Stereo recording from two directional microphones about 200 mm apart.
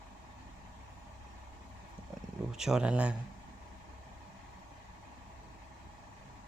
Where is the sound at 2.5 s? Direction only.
5° right (ahead or behind).